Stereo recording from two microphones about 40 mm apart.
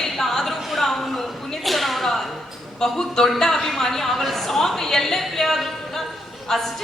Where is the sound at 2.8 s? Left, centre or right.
Centre.